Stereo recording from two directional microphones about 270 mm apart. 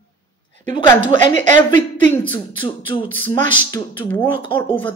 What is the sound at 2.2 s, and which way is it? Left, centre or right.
Speech, centre.